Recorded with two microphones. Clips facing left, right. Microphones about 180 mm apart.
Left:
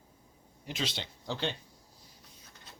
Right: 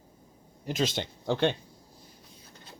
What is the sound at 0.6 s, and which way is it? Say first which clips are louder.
Speech: right 8 dB; 45° right (ahead or behind).